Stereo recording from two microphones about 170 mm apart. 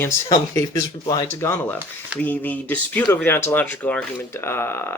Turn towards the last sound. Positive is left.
turn(degrees=15)  # may be behind; listen again after turning